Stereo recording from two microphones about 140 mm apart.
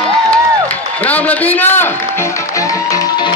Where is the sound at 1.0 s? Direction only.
10° left (ahead or behind); by 3.3 s 30° left (ahead or behind).